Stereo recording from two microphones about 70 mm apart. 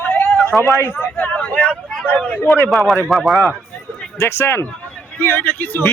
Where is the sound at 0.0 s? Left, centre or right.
Left.